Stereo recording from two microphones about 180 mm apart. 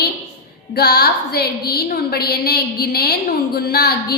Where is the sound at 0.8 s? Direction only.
65° left (ahead or behind).